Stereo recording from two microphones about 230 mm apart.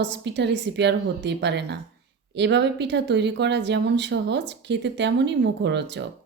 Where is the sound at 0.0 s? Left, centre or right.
Right.